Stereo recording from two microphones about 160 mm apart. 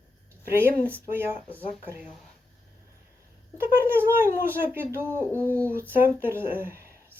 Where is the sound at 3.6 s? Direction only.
15° right (ahead or behind).